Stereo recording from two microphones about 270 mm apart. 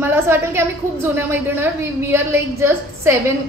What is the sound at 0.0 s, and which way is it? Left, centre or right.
A woman's voice, centre.